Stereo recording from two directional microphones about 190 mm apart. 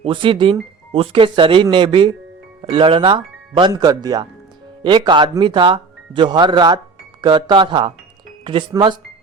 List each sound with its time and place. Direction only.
0.0 s speech: 25° right (ahead or behind)